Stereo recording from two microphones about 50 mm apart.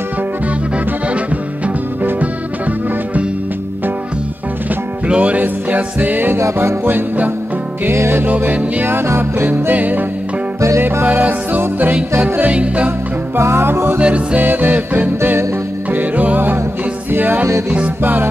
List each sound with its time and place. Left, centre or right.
1.0 s music: right
5.0 s music: right
6.3 s music: right
7.9 s music: right
9.5 s music: right
12.4 s music: right
13.4 s music: right
13.9 s music: right
14.4 s music: right